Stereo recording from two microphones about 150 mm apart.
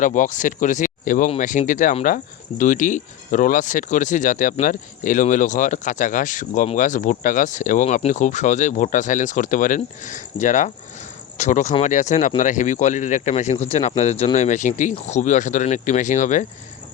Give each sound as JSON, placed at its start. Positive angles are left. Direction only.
{"t": 0.0, "sound": "speech", "side_deg": 60}